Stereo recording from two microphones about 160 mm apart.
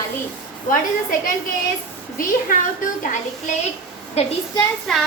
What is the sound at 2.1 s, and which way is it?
A woman's voice, 55° left (ahead or behind).